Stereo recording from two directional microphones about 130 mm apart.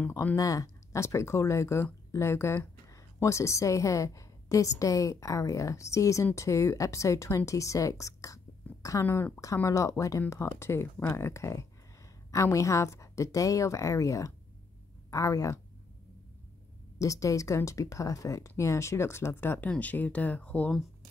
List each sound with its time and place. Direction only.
0.1 s speech: 15° left (ahead or behind)
0.4 s speech: 25° left (ahead or behind)
17.0 s speech: 25° left (ahead or behind)